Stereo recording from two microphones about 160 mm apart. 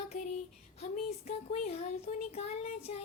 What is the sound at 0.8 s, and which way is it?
Speech, 40° left (ahead or behind).